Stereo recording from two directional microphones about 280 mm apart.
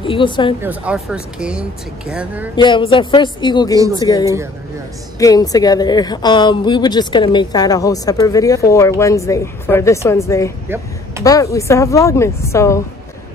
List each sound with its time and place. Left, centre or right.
0.0 s a woman's voice: centre
0.6 s speech: centre
2.5 s a woman's voice: centre
3.8 s speech: centre
5.2 s a woman's voice: centre